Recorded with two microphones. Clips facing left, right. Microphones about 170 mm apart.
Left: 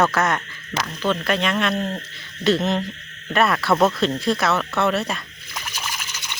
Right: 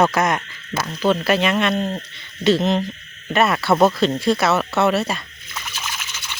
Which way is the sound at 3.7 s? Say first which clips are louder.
Right 3 dB; 25° right (ahead or behind).